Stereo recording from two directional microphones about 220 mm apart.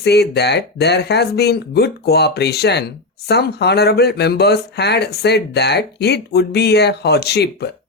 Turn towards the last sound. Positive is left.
turn(degrees=50)  # may be behind; listen again after turning